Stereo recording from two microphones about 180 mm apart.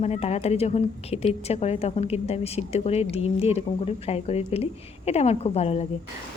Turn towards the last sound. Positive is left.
turn(degrees=35)  # may be behind; listen again after turning